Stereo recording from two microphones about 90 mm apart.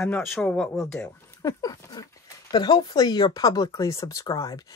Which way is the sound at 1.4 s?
40° left (ahead or behind).